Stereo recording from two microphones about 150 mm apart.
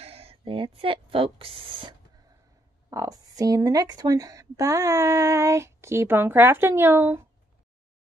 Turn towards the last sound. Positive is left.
turn(degrees=-15)  # may be behind; listen again after turning